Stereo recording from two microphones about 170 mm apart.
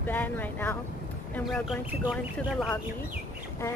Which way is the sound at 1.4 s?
Centre (ahead or behind).